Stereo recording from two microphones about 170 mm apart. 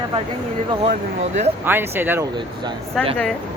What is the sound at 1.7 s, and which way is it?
Speech, 10° right (ahead or behind).